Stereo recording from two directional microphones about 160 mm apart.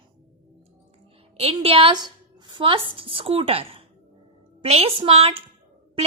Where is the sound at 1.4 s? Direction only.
40° right (ahead or behind).